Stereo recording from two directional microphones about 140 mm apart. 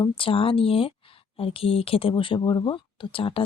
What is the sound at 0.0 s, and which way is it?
Speech, 40° left (ahead or behind).